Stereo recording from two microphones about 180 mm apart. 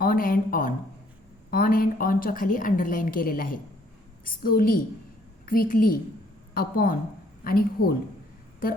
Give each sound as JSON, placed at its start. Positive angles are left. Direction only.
{"t": 0.0, "sound": "a woman's voice", "side_deg": 50}